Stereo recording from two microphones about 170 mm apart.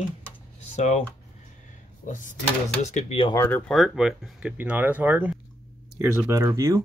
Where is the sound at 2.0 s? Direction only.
50° left (ahead or behind).